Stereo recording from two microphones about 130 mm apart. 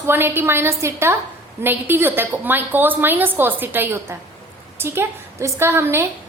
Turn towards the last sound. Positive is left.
turn(degrees=-20)  # may be behind; listen again after turning